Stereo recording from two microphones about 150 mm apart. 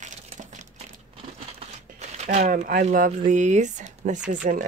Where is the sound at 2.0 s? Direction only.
50° right (ahead or behind).